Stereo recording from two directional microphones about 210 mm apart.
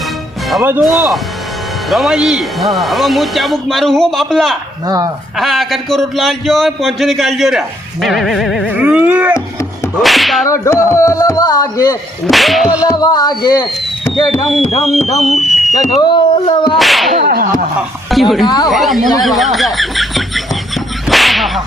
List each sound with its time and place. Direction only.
0.5 s speech: 5° right (ahead or behind)
4.9 s speech: 15° right (ahead or behind)
5.4 s speech: centre (ahead or behind)
10.9 s a sound: 15° left (ahead or behind)
12.3 s speech: centre (ahead or behind)
12.9 s speech: 20° left (ahead or behind)
14.9 s speech: centre (ahead or behind)
16.0 s speech: 20° left (ahead or behind)
16.7 s speech: centre (ahead or behind)
17.2 s a sound: 45° right (ahead or behind)
17.7 s speech: centre (ahead or behind)
18.4 s a sound: 20° left (ahead or behind)
18.7 s speech: centre (ahead or behind)
19.2 s beatboxing: centre (ahead or behind)